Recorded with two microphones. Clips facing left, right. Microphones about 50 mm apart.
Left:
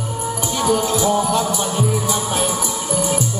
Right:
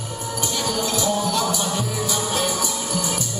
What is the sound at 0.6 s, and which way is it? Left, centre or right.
Music, centre.